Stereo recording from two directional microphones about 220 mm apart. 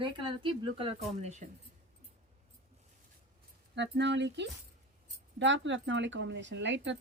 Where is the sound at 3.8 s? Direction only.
50° right (ahead or behind).